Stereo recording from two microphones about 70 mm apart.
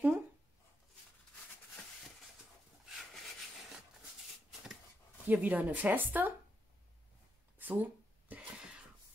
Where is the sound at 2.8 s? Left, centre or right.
Centre.